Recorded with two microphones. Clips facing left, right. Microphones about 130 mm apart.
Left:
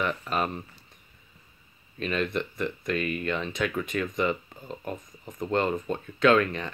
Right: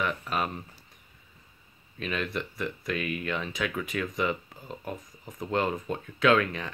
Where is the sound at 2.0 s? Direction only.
Centre (ahead or behind).